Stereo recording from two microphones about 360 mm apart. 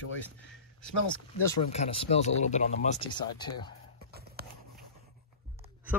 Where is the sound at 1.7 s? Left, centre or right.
Centre.